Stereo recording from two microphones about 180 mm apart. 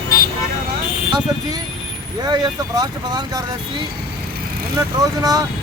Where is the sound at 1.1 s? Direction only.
20° right (ahead or behind).